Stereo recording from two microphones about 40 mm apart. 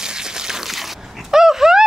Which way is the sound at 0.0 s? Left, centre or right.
Centre.